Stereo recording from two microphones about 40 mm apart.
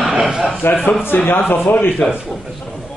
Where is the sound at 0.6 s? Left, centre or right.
Left.